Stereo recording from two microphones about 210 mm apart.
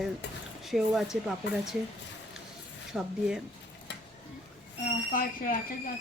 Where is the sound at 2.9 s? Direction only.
5° right (ahead or behind).